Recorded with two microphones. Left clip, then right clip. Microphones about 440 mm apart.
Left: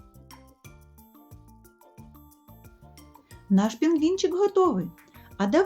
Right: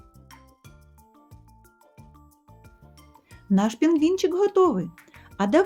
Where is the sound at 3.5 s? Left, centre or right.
Centre.